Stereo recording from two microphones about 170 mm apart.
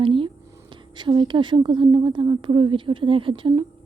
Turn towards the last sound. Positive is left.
turn(degrees=-30)  # may be behind; listen again after turning